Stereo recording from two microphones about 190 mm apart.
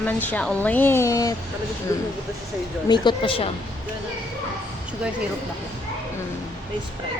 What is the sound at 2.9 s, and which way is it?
Speech, 25° left (ahead or behind).